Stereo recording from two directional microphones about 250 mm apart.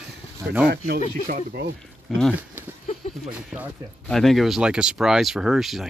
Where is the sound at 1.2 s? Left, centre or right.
Right.